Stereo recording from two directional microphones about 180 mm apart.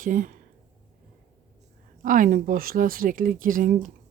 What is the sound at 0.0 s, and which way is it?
Speech, 50° right (ahead or behind).